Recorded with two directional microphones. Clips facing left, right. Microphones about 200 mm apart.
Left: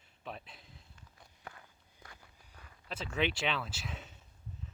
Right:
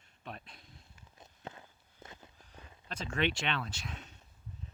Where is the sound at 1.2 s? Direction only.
25° right (ahead or behind).